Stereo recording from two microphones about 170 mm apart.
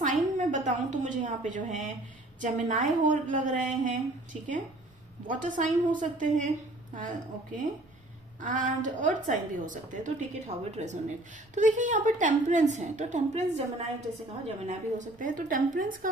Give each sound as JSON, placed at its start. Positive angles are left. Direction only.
{"t": 0.0, "sound": "a woman's voice", "side_deg": -45}